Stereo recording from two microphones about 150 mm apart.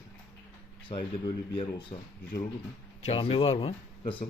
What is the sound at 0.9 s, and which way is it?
Speech, 35° left (ahead or behind).